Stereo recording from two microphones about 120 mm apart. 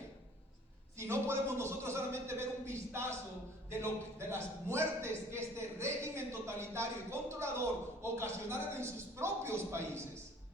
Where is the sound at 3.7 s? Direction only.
20° right (ahead or behind).